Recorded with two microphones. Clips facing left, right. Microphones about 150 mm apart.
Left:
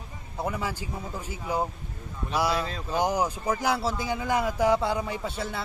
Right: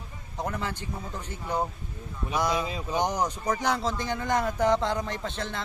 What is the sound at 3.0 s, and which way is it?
A man's voice, 10° left (ahead or behind).